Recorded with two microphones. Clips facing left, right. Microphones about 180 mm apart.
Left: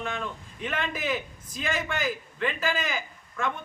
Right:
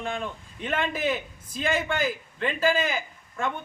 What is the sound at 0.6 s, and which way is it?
A man's voice, 30° right (ahead or behind).